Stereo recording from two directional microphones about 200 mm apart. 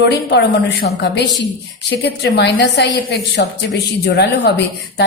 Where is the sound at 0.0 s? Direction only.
55° left (ahead or behind).